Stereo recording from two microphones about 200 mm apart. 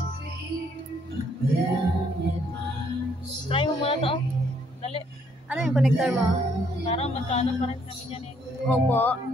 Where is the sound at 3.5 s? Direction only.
30° left (ahead or behind).